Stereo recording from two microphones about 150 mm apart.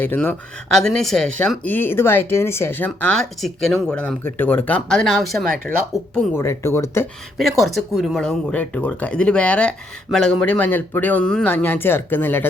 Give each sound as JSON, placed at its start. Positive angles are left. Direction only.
{"t": 0.0, "sound": "speech", "side_deg": 15}
{"t": 0.7, "sound": "speech", "side_deg": 0}
{"t": 6.3, "sound": "speech", "side_deg": 15}
{"t": 7.3, "sound": "speech", "side_deg": 0}